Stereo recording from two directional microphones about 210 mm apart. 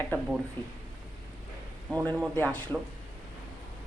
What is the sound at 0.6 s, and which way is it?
Speech, 10° left (ahead or behind).